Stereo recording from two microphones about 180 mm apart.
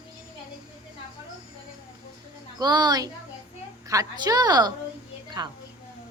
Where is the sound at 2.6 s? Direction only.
25° right (ahead or behind).